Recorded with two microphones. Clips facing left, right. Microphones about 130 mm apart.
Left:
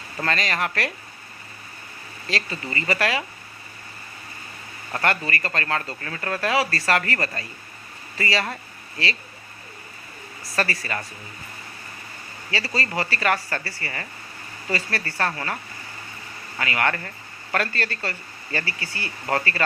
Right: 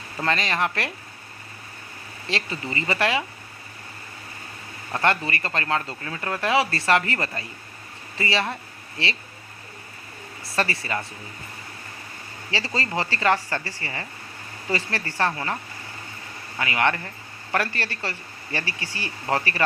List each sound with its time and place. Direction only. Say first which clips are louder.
0.2 s speech: right 1 dB; 25° right (ahead or behind)
2.2 s speech: even; 25° right (ahead or behind)
4.9 s speech: right 1 dB; 20° right (ahead or behind)
10.5 s speech: even; 25° right (ahead or behind)
12.5 s speech: even; 20° right (ahead or behind)
16.6 s speech: right 1 dB; 20° right (ahead or behind)